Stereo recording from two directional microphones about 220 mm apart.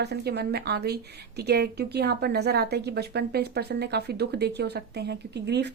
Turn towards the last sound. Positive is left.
turn(degrees=-50)  # may be behind; listen again after turning